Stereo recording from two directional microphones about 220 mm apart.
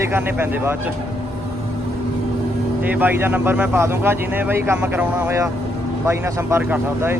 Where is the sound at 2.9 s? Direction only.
10° right (ahead or behind).